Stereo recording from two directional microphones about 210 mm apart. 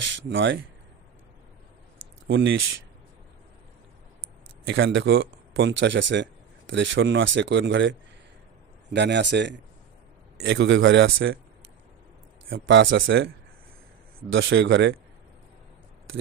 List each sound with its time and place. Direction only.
0.0 s speech: 60° right (ahead or behind)
2.2 s speech: 60° right (ahead or behind)
4.6 s speech: 60° right (ahead or behind)
8.9 s speech: 55° right (ahead or behind)
12.5 s speech: 65° right (ahead or behind)
14.3 s speech: 60° right (ahead or behind)